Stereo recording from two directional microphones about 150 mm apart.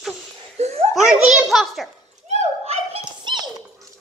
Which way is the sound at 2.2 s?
45° right (ahead or behind).